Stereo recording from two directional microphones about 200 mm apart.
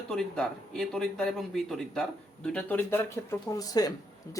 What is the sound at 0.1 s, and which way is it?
A man's voice, 5° left (ahead or behind).